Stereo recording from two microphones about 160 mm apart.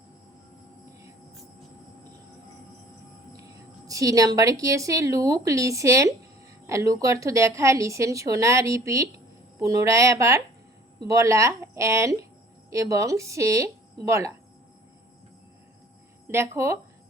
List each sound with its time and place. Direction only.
3.8 s a woman's voice: 20° right (ahead or behind)
16.2 s speech: 15° right (ahead or behind)